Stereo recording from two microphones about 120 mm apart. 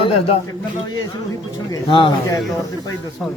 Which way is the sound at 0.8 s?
35° left (ahead or behind).